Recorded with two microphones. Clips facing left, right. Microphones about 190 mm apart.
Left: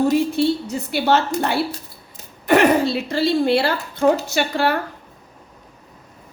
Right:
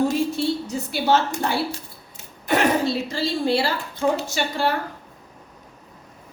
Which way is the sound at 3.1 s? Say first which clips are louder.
Left 5 dB; 60° left (ahead or behind).